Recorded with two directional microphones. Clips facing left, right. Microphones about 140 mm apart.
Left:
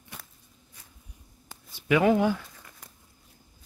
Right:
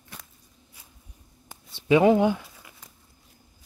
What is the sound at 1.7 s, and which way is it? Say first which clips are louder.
Speech: right 4 dB; 25° right (ahead or behind).